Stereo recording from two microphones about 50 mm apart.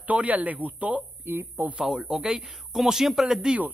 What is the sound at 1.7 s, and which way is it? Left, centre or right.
Speech, centre.